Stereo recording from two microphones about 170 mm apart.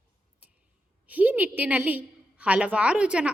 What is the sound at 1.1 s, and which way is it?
A woman's voice, 10° right (ahead or behind).